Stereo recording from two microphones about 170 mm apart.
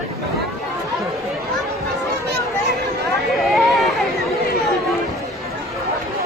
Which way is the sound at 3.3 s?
Centre (ahead or behind).